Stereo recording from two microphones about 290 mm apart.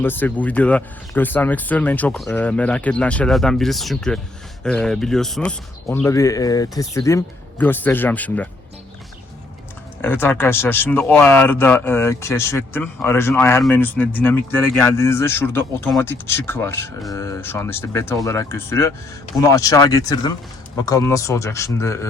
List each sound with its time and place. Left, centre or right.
0.0 s a man's voice: centre
10.0 s a man's voice: centre